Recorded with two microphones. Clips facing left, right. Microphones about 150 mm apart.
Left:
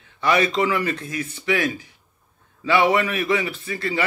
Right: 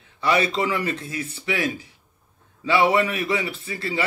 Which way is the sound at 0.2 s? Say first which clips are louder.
Left 2 dB; 30° right (ahead or behind).